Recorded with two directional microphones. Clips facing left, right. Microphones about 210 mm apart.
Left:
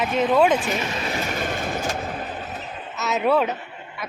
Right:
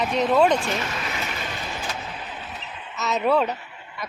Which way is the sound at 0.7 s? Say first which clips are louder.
Left 2 dB; 20° left (ahead or behind).